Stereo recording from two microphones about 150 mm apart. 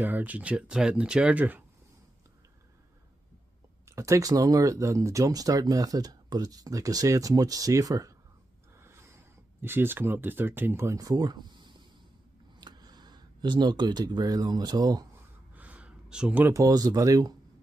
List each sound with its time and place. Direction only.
0.0 s speech: 10° right (ahead or behind)
3.8 s speech: 20° right (ahead or behind)
15.5 s speech: 10° right (ahead or behind)